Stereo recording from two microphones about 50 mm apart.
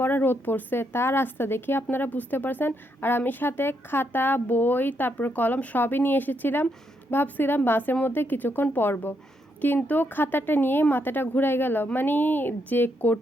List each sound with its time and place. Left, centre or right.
0.0 s a woman's voice: left